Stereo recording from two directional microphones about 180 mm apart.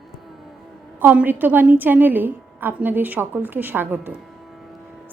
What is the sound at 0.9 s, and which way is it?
A woman's voice, 10° right (ahead or behind).